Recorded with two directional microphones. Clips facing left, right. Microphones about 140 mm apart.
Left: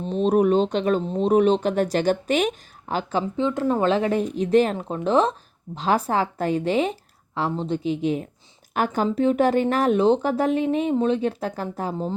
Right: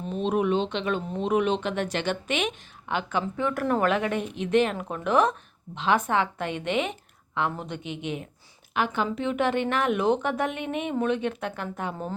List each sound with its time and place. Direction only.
0.0 s speech: 35° left (ahead or behind)
3.4 s a woman's voice: 20° left (ahead or behind)